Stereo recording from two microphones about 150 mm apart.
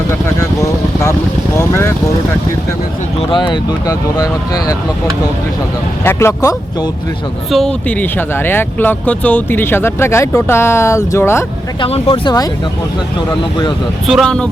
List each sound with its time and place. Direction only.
0.3 s vehicle: 20° left (ahead or behind)
3.2 s speech: 35° left (ahead or behind)
6.1 s speech: 20° left (ahead or behind)
7.5 s speech: 5° left (ahead or behind)
11.8 s speech: 40° left (ahead or behind)
14.1 s speech: centre (ahead or behind)